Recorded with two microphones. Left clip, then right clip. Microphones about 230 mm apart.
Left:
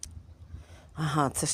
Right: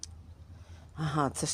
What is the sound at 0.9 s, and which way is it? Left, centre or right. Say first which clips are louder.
Speech: left 3 dB; left.